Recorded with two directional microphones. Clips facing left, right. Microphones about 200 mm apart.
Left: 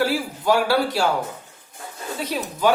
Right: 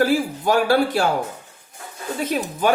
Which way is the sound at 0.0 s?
50° right (ahead or behind).